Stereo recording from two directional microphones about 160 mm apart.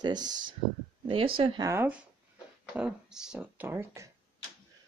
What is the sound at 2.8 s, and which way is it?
Speech, 5° right (ahead or behind).